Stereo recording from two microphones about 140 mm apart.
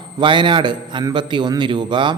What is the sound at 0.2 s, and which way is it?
A man's voice, 35° right (ahead or behind).